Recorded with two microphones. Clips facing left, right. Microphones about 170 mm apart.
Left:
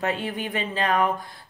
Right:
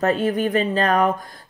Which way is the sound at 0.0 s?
40° right (ahead or behind).